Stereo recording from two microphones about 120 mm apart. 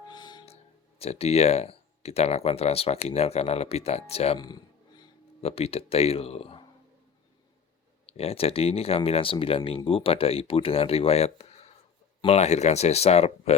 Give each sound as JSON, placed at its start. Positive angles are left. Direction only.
{"t": 0.1, "sound": "music", "side_deg": 40}
{"t": 0.4, "sound": "speech", "side_deg": 60}
{"t": 4.4, "sound": "a sound", "side_deg": 35}
{"t": 5.4, "sound": "speech", "side_deg": 55}
{"t": 8.0, "sound": "speech", "side_deg": 55}